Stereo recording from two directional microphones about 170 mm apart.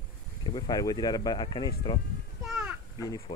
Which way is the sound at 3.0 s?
20° left (ahead or behind).